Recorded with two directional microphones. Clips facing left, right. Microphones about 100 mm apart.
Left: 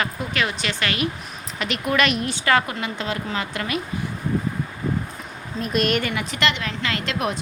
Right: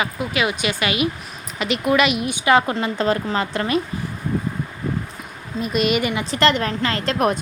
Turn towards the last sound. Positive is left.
turn(degrees=-45)  # may be behind; listen again after turning